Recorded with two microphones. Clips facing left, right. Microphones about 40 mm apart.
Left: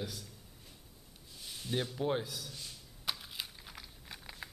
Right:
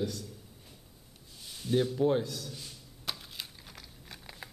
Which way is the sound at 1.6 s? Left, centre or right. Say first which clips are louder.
Right 8 dB; centre.